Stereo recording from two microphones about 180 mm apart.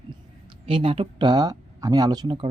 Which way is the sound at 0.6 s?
30° right (ahead or behind).